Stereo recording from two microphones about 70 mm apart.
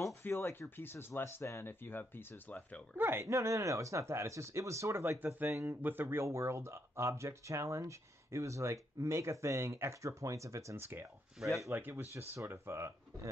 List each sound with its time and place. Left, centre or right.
0.2 s speech: left
1.7 s speech: left
3.0 s speech: right
3.3 s speech: right
5.5 s speech: right
11.3 s speech: centre
11.7 s speech: right